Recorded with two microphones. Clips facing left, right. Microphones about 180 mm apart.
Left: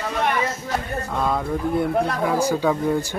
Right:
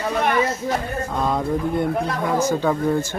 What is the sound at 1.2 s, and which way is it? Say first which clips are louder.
Speech: right 1 dB; centre (ahead or behind).